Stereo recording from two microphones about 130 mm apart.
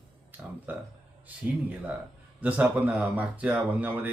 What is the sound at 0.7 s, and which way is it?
Speech, 15° right (ahead or behind).